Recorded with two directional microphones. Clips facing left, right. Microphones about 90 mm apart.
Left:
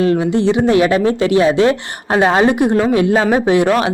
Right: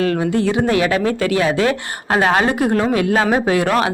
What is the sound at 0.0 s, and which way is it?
Speech, 25° left (ahead or behind).